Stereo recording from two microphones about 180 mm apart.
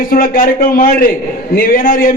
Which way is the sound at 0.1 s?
50° left (ahead or behind).